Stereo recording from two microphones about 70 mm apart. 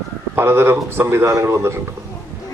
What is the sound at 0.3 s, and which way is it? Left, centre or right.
Speech, right.